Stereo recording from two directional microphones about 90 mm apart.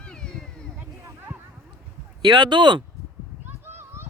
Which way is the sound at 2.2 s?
55° right (ahead or behind).